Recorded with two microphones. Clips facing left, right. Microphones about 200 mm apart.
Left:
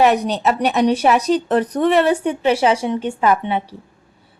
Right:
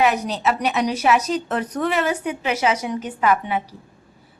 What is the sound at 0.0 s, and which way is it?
A woman's voice, 35° left (ahead or behind).